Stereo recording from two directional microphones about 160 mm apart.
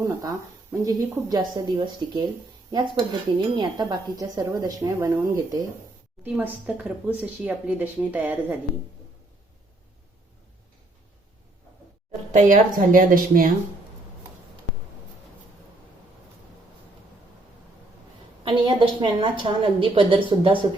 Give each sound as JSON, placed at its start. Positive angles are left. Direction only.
{"t": 0.0, "sound": "a woman's voice", "side_deg": -20}
{"t": 6.2, "sound": "speech", "side_deg": -10}
{"t": 12.3, "sound": "speech", "side_deg": -55}
{"t": 18.4, "sound": "a woman's voice", "side_deg": -30}